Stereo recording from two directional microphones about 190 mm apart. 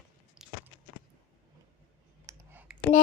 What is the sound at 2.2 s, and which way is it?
Clicking, 10° right (ahead or behind).